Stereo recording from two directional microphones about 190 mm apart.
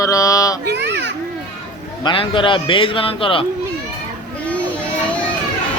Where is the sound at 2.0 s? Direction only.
25° left (ahead or behind).